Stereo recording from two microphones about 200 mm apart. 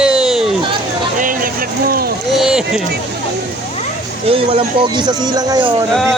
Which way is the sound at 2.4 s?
5° right (ahead or behind).